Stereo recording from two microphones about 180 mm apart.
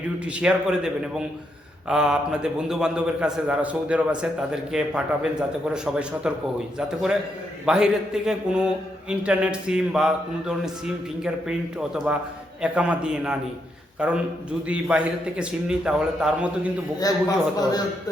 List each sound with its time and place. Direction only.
0.3 s a man's voice: 5° right (ahead or behind)
17.0 s a man's voice: 20° left (ahead or behind)